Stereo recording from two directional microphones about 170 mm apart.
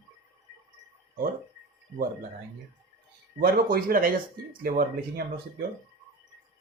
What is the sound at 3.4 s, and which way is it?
Speech, 55° right (ahead or behind).